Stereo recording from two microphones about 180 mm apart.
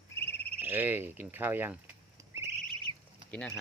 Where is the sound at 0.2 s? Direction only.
10° left (ahead or behind).